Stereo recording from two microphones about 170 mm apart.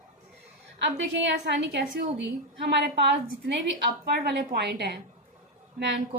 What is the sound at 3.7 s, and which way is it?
A woman's voice, 70° right (ahead or behind).